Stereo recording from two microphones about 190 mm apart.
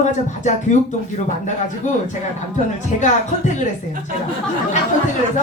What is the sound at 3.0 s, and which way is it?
Speech, 40° left (ahead or behind).